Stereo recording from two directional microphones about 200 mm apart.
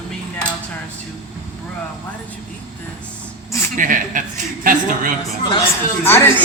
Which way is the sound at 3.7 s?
40° right (ahead or behind).